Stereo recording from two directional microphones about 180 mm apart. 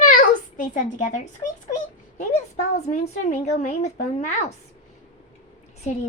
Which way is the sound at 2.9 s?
40° left (ahead or behind).